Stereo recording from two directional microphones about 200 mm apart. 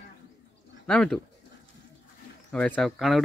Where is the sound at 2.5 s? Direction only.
5° left (ahead or behind).